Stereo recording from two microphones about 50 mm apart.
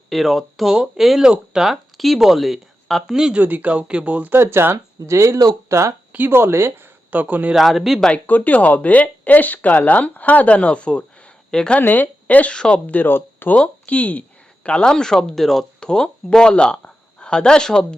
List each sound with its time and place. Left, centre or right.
0.1 s speech: centre
3.4 s a man's voice: right
3.7 s speech: right
4.3 s speech: right
6.1 s speech: right
6.3 s speech: right
7.1 s a man's voice: right
7.5 s speech: centre
8.3 s speech: left; by 11.8 s centre
11.8 s speech: left
12.5 s speech: centre
12.9 s speech: left
13.6 s speech: left